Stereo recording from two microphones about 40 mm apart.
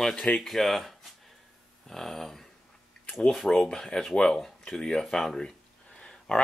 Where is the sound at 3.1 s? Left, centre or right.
Centre.